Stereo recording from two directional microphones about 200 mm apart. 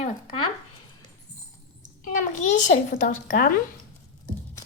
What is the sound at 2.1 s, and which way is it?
A child's voice, 40° left (ahead or behind).